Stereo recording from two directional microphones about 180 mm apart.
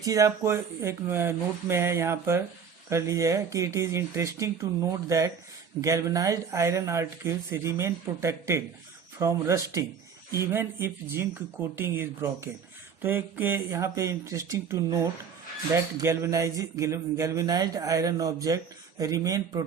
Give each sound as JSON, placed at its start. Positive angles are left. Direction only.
{"t": 0.0, "sound": "a man's voice", "side_deg": -20}